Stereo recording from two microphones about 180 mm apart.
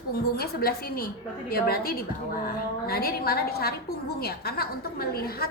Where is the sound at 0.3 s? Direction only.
60° left (ahead or behind).